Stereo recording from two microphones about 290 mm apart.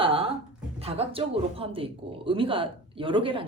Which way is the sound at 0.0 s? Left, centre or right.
Centre.